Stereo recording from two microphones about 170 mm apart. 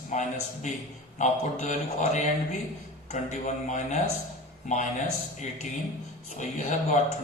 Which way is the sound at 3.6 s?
45° left (ahead or behind).